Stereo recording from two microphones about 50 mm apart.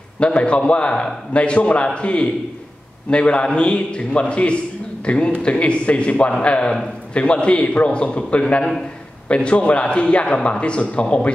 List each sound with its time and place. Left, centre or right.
0.2 s a man's voice: left